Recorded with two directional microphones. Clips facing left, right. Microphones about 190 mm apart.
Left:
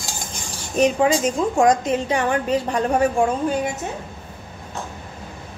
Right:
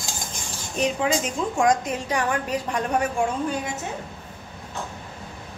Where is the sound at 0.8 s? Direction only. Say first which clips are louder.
Left 6 dB; 45° left (ahead or behind).